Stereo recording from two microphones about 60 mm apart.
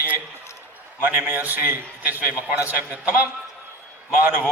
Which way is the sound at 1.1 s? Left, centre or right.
Right.